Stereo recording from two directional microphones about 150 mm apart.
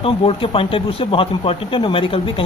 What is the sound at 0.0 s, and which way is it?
Speech, 40° left (ahead or behind).